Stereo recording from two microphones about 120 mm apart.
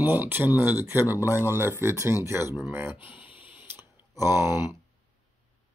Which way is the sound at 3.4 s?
10° right (ahead or behind).